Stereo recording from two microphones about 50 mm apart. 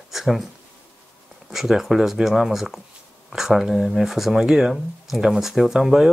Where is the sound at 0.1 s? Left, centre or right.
Centre.